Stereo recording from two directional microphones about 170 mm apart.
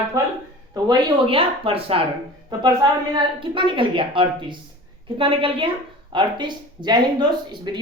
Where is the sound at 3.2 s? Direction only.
30° right (ahead or behind).